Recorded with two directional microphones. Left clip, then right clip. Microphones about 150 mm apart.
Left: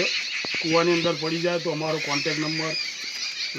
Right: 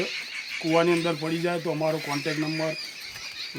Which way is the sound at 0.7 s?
30° right (ahead or behind).